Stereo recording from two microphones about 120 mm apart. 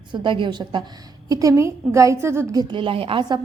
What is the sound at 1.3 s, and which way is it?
A woman's voice, 30° right (ahead or behind).